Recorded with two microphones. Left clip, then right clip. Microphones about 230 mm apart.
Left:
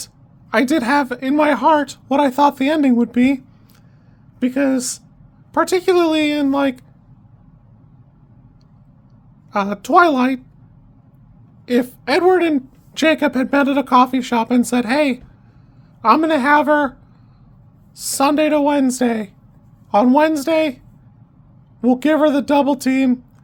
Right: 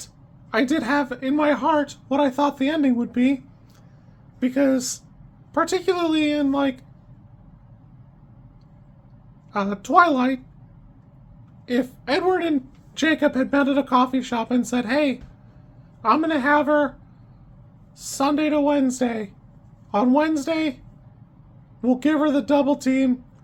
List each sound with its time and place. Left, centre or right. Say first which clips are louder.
0.5 s speech: left 5 dB; left
9.5 s speech: left 6 dB; left
11.6 s speech: left 6 dB; left
17.9 s speech: left 6 dB; left
21.8 s speech: left 6 dB; left